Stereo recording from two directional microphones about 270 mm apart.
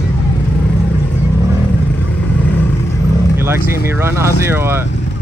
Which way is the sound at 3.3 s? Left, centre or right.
Centre.